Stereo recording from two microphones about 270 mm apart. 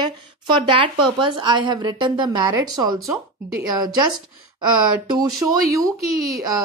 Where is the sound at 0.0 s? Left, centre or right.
Centre.